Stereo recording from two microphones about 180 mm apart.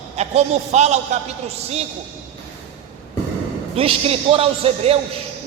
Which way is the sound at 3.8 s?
30° right (ahead or behind).